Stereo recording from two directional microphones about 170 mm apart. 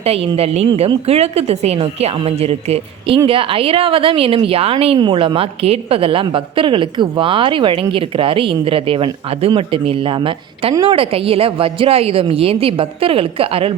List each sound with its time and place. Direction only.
0.0 s a woman's voice: 35° right (ahead or behind)